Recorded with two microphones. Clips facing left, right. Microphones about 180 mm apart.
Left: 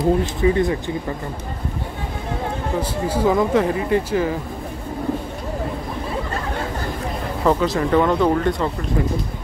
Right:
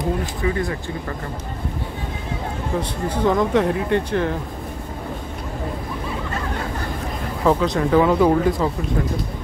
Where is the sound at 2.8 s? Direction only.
5° left (ahead or behind).